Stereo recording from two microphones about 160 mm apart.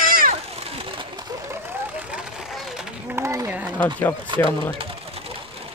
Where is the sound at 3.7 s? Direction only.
10° left (ahead or behind).